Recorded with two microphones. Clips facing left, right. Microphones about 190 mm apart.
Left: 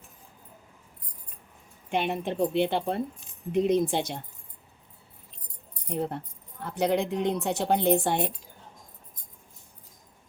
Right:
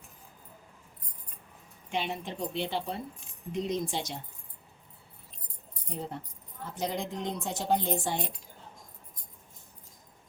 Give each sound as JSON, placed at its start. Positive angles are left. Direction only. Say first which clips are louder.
{"t": 1.9, "sound": "speech", "louder": "left 6 dB", "side_deg": 55}
{"t": 5.9, "sound": "speech", "louder": "left 7 dB", "side_deg": 60}